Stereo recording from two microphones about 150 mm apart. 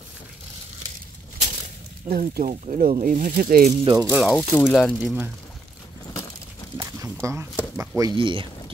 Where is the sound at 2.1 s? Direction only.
85° right.